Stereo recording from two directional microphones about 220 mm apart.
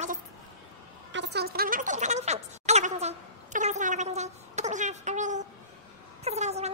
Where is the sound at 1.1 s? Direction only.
50° right (ahead or behind).